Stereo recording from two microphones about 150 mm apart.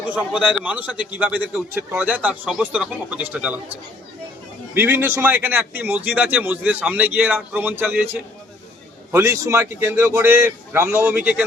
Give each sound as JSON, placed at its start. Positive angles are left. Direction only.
{"t": 0.0, "sound": "a man's voice", "side_deg": -10}
{"t": 9.1, "sound": "a man's voice", "side_deg": -20}